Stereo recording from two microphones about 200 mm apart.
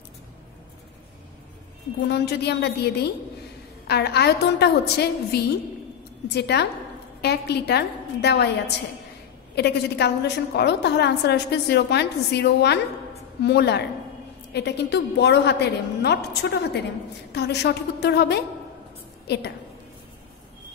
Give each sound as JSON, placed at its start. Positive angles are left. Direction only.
{"t": 2.0, "sound": "a woman's voice", "side_deg": 55}